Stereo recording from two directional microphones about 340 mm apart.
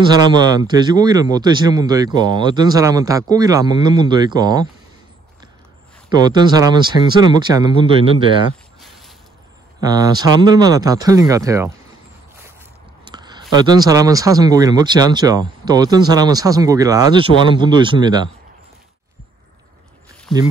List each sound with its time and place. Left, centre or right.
0.6 s speech: centre
6.0 s speech: centre
8.8 s mechanisms: centre
9.8 s speech: centre
13.0 s a sound: centre
13.5 s speech: centre
20.3 s speech: centre